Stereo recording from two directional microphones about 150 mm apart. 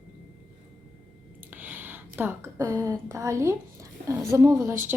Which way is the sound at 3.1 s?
20° right (ahead or behind).